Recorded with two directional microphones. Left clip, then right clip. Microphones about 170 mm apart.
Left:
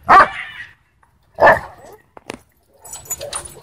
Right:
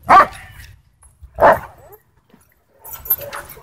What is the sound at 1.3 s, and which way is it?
Dog, 5° left (ahead or behind).